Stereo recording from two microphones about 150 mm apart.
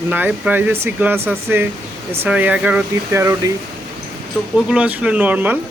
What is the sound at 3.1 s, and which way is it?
Speech, 20° right (ahead or behind).